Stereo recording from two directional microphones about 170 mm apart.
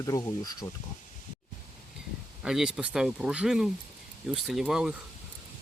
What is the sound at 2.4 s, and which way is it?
Speech, 5° right (ahead or behind).